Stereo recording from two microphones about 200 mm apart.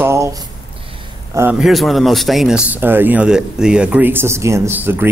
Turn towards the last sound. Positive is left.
turn(degrees=-10)  # may be behind; listen again after turning